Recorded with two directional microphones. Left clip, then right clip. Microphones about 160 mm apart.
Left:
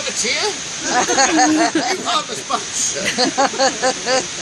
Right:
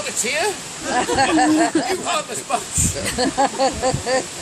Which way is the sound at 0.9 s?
25° right (ahead or behind).